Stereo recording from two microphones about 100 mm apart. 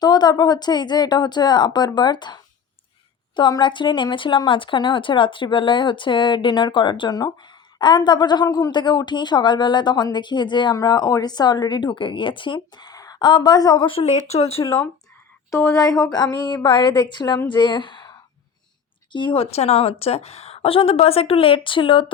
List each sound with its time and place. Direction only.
0.0 s speech: 45° left (ahead or behind)
8.7 s speech: 50° left (ahead or behind)
12.5 s speech: 40° left (ahead or behind)
13.9 s speech: 90° left
15.4 s speech: 35° left (ahead or behind); by 18.1 s 50° left (ahead or behind)
19.1 s a woman's voice: 55° left (ahead or behind)